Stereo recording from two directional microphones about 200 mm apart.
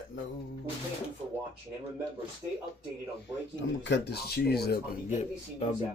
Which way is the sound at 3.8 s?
60° left (ahead or behind).